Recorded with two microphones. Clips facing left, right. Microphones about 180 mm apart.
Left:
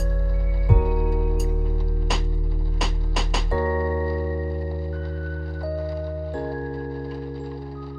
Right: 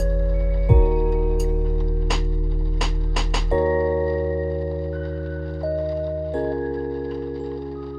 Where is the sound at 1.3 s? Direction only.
Centre (ahead or behind).